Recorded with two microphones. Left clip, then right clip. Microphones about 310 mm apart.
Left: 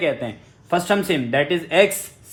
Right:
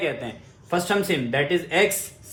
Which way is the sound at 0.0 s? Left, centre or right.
Left.